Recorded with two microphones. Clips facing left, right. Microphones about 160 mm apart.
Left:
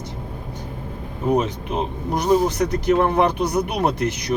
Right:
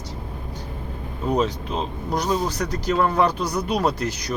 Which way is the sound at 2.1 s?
55° left (ahead or behind).